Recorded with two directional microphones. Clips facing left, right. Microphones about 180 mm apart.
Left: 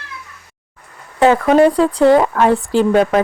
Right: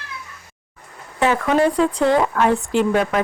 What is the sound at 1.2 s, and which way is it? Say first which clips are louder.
Speech: left 6 dB; 35° left (ahead or behind).